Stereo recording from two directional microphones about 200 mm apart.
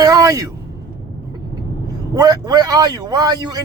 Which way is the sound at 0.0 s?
15° right (ahead or behind).